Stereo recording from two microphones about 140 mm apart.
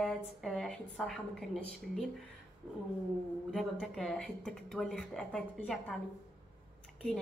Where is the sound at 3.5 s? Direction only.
Centre (ahead or behind).